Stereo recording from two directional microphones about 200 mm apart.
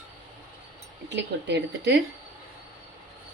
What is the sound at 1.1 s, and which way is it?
Speech, 60° right (ahead or behind).